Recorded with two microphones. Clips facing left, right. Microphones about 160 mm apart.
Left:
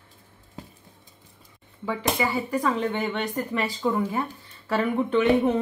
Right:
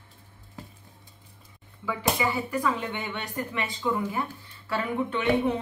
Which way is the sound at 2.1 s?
40° left (ahead or behind).